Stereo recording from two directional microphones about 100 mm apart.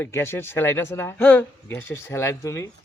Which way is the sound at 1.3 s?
15° left (ahead or behind).